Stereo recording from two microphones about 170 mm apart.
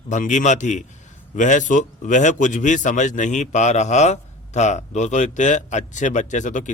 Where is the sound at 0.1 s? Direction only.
45° left (ahead or behind).